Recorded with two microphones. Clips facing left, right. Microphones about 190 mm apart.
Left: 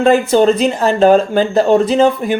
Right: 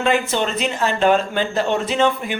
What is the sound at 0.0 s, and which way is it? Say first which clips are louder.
Speech: left 9 dB; 40° left (ahead or behind).